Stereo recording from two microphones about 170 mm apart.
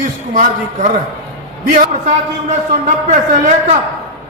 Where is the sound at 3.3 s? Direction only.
45° right (ahead or behind).